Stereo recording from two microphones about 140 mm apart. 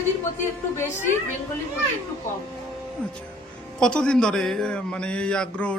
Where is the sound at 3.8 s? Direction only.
5° left (ahead or behind).